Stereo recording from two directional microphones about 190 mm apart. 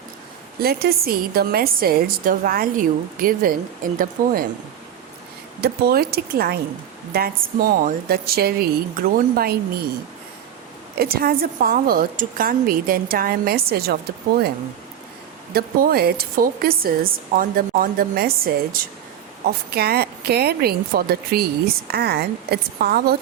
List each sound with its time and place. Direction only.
0.6 s a woman's voice: 55° right (ahead or behind)
5.5 s a woman's voice: 55° right (ahead or behind)
10.9 s a woman's voice: 55° right (ahead or behind)
15.5 s a woman's voice: 55° right (ahead or behind)